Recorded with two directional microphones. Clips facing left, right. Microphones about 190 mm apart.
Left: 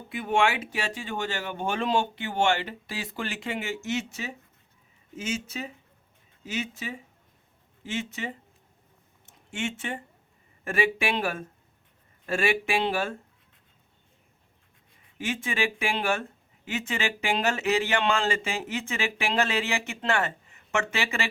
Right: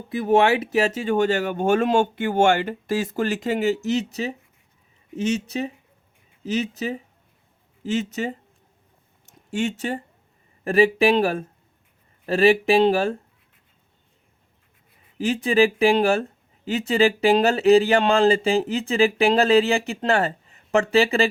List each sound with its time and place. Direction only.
0.1 s speech: 40° right (ahead or behind)
9.2 s a sound: 35° right (ahead or behind)
10.6 s speech: 35° right (ahead or behind)
15.2 s speech: 35° right (ahead or behind)